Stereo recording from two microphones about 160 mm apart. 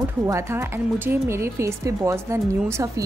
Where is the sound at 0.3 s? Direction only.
15° right (ahead or behind).